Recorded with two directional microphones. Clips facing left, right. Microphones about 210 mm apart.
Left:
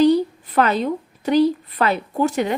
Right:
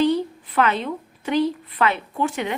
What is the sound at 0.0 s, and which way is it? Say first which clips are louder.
A woman's voice: left 5 dB; 40° left (ahead or behind).